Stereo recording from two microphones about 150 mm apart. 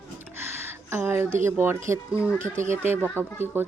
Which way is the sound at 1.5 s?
15° right (ahead or behind).